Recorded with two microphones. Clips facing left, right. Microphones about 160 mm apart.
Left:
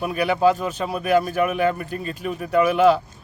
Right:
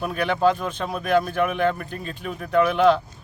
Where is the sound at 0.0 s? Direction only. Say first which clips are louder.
Left 2 dB; 5° left (ahead or behind).